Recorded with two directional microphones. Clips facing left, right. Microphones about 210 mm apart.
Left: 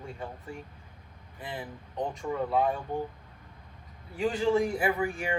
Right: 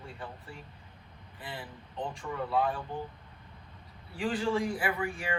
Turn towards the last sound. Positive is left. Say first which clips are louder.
# left 4 dB
turn(degrees=25)  # may be behind; listen again after turning